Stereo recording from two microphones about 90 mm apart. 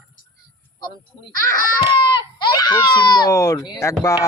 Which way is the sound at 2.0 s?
60° left (ahead or behind).